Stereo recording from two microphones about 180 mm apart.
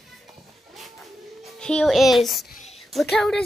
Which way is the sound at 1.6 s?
5° left (ahead or behind).